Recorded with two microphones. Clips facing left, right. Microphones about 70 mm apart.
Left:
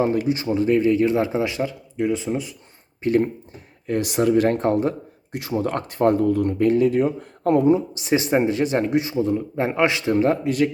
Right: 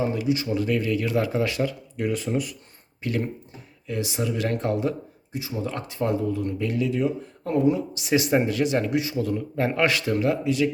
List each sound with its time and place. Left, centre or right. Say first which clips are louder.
0.0 s speech: left 4 dB; left
3.0 s speech: left 8 dB; left
3.8 s speech: left 8 dB; left
5.3 s speech: left 6 dB; left
7.2 s speech: left 7 dB; left
7.7 s speech: left 4 dB; left
10.4 s speech: left 2 dB; left